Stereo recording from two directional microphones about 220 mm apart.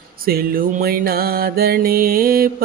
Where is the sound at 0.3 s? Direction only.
45° right (ahead or behind).